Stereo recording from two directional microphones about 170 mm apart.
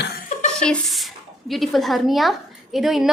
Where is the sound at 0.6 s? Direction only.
Centre (ahead or behind).